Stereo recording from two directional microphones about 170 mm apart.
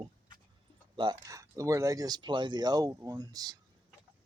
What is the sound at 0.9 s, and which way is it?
Speech, 20° right (ahead or behind).